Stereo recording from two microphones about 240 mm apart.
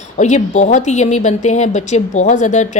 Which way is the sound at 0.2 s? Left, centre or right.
Left.